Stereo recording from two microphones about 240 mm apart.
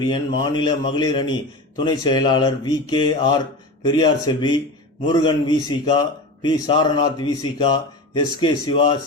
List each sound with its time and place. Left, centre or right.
0.0 s a man's voice: centre